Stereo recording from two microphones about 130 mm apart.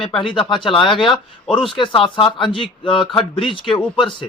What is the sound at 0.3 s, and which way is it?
A man's voice, 40° left (ahead or behind).